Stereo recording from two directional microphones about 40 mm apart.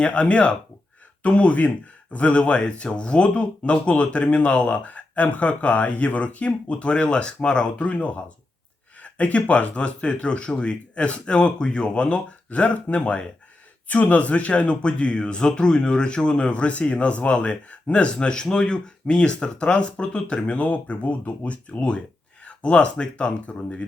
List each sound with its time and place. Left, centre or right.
0.0 s speech: left
12.5 s speech: left
13.0 s speech: left
13.8 s speech: left